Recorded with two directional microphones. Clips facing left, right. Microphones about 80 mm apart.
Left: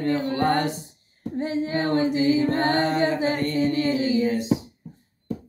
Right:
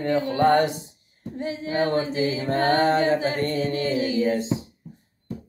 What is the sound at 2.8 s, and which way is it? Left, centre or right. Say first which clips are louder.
Mantra: right 2 dB; right.